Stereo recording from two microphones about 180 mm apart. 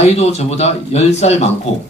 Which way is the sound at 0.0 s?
35° left (ahead or behind).